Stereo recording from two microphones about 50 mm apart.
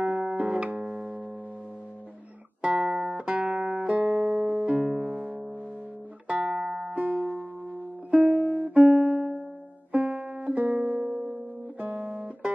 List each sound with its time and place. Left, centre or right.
0.0 s music: right
2.6 s music: right
9.1 s music: centre